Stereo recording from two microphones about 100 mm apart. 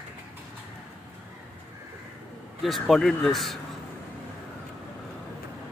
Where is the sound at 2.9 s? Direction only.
Centre (ahead or behind).